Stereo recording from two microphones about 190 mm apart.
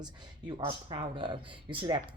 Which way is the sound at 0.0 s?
25° right (ahead or behind).